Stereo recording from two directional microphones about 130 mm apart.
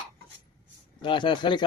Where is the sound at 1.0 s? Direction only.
40° left (ahead or behind).